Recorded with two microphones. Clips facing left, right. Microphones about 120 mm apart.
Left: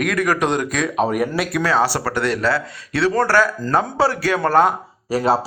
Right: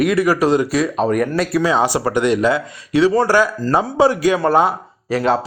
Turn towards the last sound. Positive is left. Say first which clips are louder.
# right 1 dB
turn(degrees=40)  # may be behind; listen again after turning